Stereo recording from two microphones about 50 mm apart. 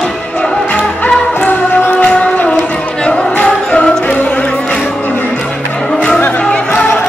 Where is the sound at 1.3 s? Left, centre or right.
Left.